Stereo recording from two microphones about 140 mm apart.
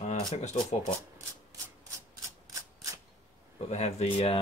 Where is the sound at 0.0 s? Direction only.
55° left (ahead or behind).